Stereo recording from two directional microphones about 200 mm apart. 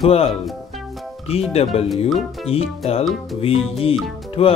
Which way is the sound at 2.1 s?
Centre (ahead or behind).